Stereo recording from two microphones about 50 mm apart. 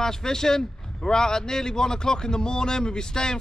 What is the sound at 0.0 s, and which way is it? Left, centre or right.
A man's voice, centre.